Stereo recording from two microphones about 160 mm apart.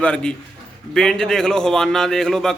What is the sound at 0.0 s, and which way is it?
A man's voice, 5° left (ahead or behind).